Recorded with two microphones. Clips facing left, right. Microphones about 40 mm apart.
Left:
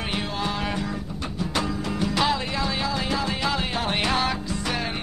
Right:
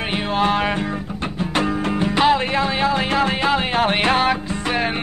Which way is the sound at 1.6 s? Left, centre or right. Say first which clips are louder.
Right 7 dB; right.